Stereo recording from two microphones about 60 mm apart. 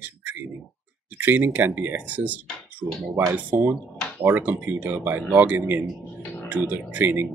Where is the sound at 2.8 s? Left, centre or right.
Centre.